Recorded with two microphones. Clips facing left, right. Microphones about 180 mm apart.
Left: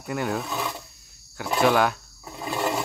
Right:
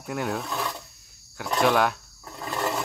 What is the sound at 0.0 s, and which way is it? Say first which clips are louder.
Speech: left 2 dB; centre (ahead or behind).